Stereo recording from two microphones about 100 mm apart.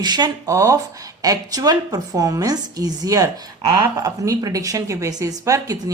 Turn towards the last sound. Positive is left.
turn(degrees=-35)  # may be behind; listen again after turning